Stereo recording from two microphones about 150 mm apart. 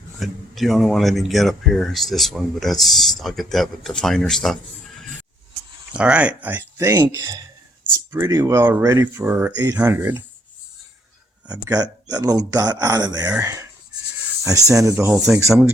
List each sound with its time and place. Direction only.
0.2 s speech: centre (ahead or behind)
5.9 s speech: 5° right (ahead or behind)
11.7 s speech: 25° right (ahead or behind)